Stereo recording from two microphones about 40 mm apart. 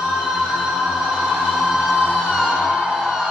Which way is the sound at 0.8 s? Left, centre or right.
Centre.